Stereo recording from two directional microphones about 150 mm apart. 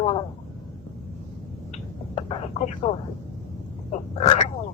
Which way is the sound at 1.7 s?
40° left (ahead or behind).